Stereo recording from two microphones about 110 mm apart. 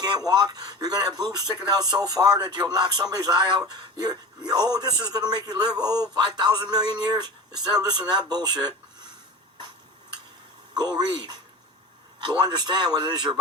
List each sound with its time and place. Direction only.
0.0 s speech: 35° right (ahead or behind)
10.8 s speech: 40° right (ahead or behind)